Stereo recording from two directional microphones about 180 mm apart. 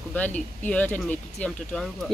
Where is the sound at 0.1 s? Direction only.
10° left (ahead or behind).